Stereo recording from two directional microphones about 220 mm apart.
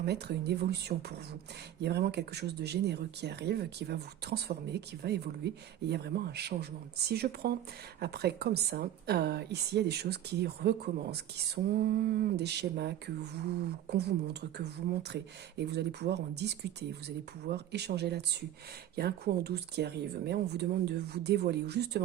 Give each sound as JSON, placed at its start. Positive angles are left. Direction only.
{"t": 0.0, "sound": "a woman's voice", "side_deg": -50}